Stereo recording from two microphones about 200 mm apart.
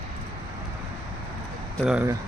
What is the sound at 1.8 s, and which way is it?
Speech, 5° right (ahead or behind).